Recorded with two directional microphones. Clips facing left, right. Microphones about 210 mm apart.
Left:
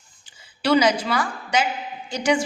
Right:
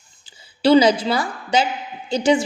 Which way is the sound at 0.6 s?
30° right (ahead or behind).